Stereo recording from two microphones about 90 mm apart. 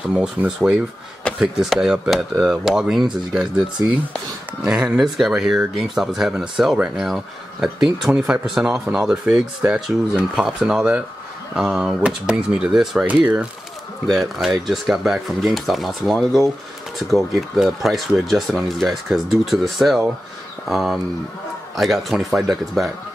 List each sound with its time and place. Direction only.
0.1 s speech: 10° right (ahead or behind)
1.3 s a sound: 10° left (ahead or behind)
1.6 s speech: 5° right (ahead or behind)
4.6 s speech: 10° right (ahead or behind)
13.0 s speech: 15° right (ahead or behind)
14.0 s speech: centre (ahead or behind)